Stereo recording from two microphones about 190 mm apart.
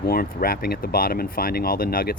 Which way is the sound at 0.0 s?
50° left (ahead or behind).